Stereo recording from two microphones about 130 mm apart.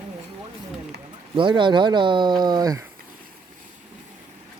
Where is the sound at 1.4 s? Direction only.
40° right (ahead or behind).